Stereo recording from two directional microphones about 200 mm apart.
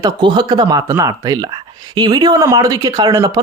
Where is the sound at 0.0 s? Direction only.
20° right (ahead or behind).